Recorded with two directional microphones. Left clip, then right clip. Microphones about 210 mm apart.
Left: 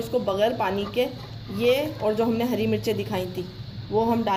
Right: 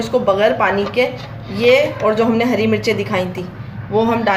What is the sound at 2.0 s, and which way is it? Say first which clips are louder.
Speech: right 9 dB; 40° left (ahead or behind).